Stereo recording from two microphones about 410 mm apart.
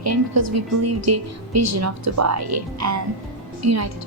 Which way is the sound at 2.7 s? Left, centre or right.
Right.